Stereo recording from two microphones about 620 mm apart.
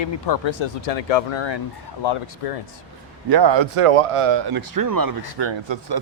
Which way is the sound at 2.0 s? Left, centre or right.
Left.